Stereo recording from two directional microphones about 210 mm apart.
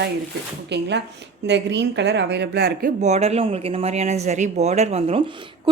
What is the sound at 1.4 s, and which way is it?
A woman's voice, 55° right (ahead or behind).